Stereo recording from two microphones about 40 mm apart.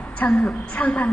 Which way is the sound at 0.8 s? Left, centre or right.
Left.